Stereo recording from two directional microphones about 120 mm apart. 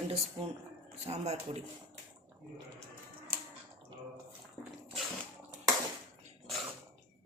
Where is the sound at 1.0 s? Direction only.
65° right (ahead or behind).